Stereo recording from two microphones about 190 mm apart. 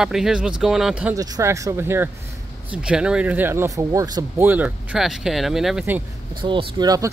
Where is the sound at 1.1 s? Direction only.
20° right (ahead or behind).